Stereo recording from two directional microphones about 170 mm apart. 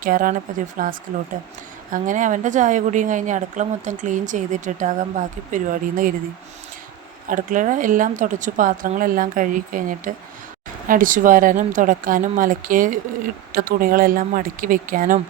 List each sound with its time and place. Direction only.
0.0 s a woman's voice: 55° right (ahead or behind)
7.3 s a woman's voice: 50° right (ahead or behind)